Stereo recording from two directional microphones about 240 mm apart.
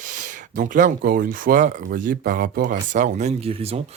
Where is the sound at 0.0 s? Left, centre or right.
Right.